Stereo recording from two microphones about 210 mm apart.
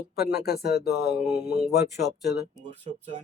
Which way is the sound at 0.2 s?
50° left (ahead or behind).